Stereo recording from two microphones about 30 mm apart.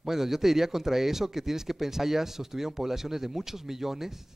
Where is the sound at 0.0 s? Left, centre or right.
Centre.